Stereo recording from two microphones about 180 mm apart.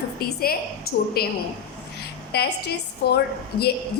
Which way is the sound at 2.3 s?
65° left (ahead or behind).